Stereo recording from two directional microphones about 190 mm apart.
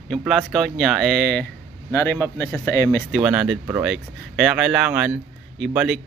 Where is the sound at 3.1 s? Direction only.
5° right (ahead or behind).